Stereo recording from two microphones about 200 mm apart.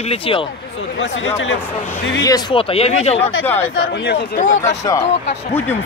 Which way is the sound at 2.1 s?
20° left (ahead or behind).